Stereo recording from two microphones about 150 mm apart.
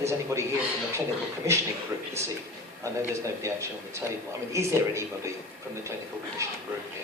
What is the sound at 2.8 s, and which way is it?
A man's voice, 20° right (ahead or behind).